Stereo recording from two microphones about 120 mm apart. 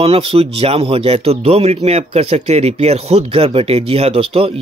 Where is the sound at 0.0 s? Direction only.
55° right (ahead or behind).